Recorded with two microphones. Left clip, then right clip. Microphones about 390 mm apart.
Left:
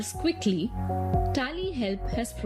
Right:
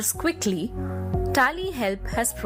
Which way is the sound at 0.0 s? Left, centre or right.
Centre.